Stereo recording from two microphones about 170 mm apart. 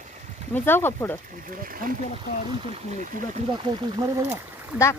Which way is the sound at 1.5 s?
55° right (ahead or behind).